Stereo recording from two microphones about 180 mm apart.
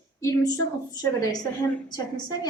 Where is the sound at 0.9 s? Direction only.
20° left (ahead or behind).